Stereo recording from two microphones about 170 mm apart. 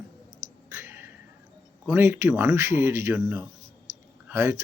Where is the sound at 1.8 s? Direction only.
15° right (ahead or behind).